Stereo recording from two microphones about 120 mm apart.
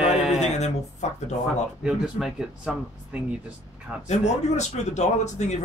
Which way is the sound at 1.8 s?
5° right (ahead or behind).